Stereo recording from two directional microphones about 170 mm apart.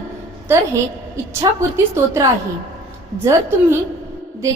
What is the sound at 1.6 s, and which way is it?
A woman's voice, 15° right (ahead or behind).